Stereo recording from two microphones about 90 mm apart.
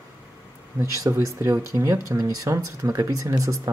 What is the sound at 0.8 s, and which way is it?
Speech, 35° right (ahead or behind).